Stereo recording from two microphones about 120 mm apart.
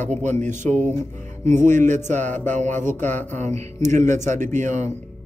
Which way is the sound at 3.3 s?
75° right (ahead or behind).